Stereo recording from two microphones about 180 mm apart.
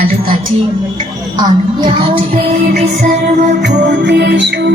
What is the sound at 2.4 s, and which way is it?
Music, 50° right (ahead or behind).